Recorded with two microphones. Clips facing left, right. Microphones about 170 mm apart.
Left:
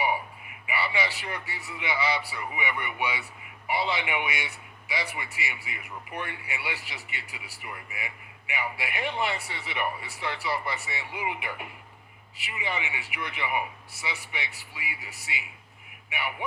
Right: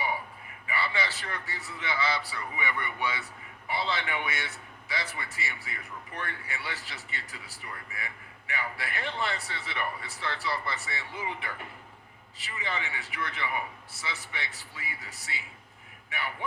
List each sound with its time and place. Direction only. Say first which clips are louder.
0.7 s a man's voice: left 2 dB; 15° left (ahead or behind)